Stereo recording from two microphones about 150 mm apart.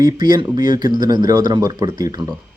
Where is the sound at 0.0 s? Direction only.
25° right (ahead or behind).